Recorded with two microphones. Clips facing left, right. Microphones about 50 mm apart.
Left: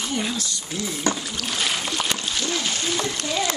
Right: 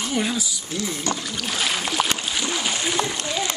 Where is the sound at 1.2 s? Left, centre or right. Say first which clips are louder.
Right 1 dB; centre.